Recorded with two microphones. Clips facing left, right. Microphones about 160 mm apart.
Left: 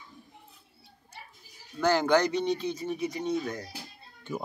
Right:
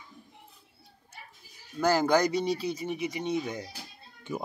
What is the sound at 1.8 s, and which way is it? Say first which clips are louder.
Speech: even; 10° right (ahead or behind).